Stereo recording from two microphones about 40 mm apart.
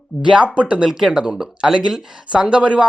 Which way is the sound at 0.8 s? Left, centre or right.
Centre.